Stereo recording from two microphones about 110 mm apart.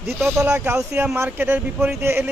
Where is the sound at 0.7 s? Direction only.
25° right (ahead or behind).